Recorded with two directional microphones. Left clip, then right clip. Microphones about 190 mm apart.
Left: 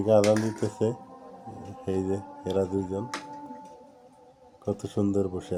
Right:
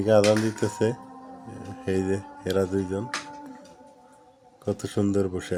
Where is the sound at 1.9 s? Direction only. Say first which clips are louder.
Right 3 dB; 15° right (ahead or behind).